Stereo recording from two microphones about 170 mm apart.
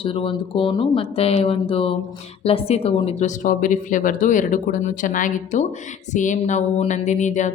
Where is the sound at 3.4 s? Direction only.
50° left (ahead or behind).